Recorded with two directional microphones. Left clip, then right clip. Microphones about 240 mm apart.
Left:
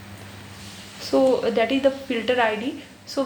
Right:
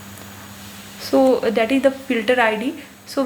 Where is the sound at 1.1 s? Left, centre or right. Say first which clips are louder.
Right 3 dB; right.